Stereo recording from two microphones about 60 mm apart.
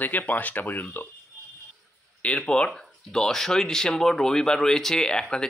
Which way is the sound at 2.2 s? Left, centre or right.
Centre.